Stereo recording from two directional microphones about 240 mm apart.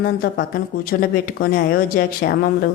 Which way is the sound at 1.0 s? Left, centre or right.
Left.